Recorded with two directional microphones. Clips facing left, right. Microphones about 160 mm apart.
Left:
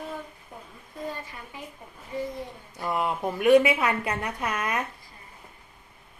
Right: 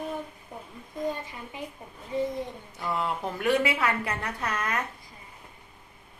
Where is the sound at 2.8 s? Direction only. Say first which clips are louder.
Left 3 dB; 20° left (ahead or behind).